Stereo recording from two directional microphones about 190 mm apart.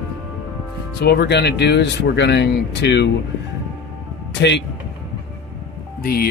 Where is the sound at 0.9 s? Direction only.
60° left (ahead or behind).